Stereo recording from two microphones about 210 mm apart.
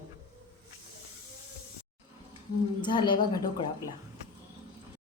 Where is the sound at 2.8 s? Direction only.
20° left (ahead or behind).